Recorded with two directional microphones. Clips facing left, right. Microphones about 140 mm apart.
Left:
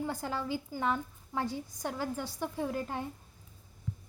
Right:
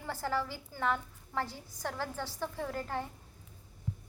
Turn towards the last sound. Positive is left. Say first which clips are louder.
# left 2 dB
turn(degrees=15)  # may be behind; listen again after turning